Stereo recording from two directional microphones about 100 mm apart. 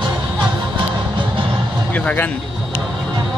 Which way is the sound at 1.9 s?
15° left (ahead or behind).